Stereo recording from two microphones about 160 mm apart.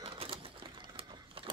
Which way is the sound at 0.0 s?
35° right (ahead or behind).